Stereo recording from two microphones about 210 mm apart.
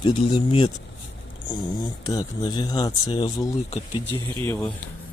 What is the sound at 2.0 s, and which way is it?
Speech, 20° left (ahead or behind).